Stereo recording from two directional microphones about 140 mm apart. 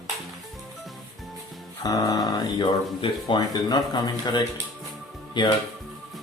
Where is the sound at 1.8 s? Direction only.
30° left (ahead or behind).